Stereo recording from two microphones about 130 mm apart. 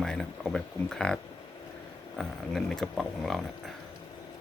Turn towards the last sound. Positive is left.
turn(degrees=0)  # may be behind; listen again after turning